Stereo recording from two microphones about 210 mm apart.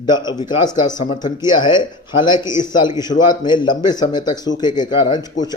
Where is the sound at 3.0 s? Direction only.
20° left (ahead or behind).